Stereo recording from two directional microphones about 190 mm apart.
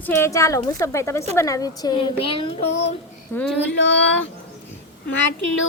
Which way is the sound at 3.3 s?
10° left (ahead or behind).